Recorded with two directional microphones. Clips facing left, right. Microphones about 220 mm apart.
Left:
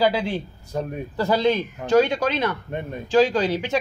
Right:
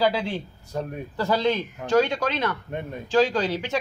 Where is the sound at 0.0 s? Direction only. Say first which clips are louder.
Left 2 dB; 10° left (ahead or behind).